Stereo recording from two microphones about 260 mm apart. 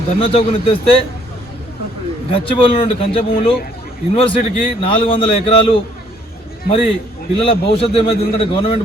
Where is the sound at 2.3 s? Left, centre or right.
Left.